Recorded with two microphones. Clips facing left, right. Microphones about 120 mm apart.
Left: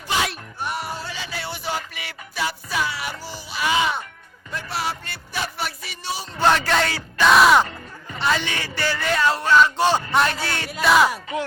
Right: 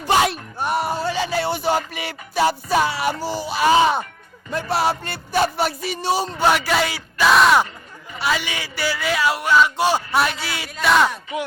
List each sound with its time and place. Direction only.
0.6 s a sound: 50° right (ahead or behind)
6.3 s a man's voice: 10° right (ahead or behind)
10.7 s speech: 5° left (ahead or behind)